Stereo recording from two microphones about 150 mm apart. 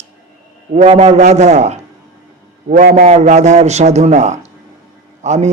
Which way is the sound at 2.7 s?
65° right (ahead or behind).